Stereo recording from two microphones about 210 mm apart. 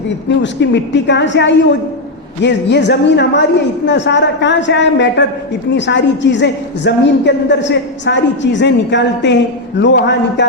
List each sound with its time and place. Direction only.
0.4 s a woman's voice: 55° left (ahead or behind)